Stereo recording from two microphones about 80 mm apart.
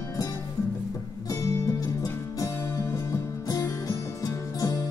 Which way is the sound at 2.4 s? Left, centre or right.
Left.